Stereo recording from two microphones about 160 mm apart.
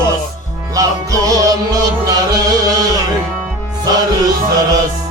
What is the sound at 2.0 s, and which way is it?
Music, 25° right (ahead or behind).